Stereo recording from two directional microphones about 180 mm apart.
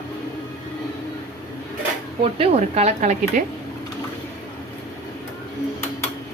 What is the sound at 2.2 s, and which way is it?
Speech, 35° right (ahead or behind).